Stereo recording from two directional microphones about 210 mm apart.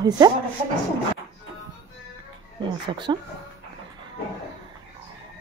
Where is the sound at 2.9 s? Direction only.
20° right (ahead or behind).